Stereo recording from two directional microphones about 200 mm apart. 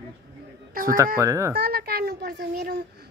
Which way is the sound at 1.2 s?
15° right (ahead or behind).